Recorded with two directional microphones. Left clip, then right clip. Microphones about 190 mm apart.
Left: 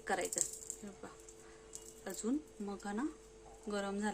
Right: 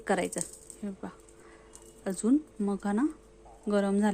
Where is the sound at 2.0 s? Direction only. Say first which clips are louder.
Right 12 dB; 40° right (ahead or behind).